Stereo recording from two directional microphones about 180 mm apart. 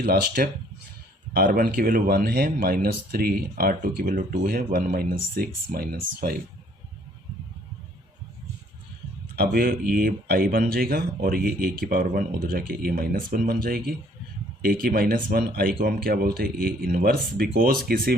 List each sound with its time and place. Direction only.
0.0 s speech: 55° right (ahead or behind)
9.3 s speech: 60° right (ahead or behind)